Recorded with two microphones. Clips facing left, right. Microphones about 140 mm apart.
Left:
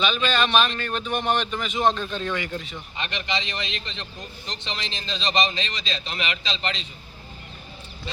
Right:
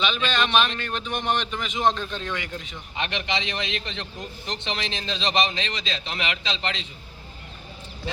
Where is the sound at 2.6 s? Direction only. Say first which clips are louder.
Right 1 dB; 15° right (ahead or behind).